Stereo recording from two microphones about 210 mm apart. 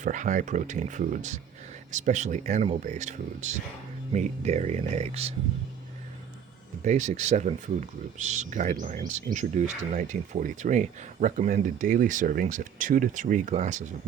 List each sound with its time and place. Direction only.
0.0 s speech: 35° right (ahead or behind)
6.8 s speech: 35° right (ahead or behind)